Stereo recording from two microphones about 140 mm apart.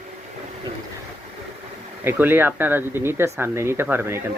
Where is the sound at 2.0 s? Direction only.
15° right (ahead or behind).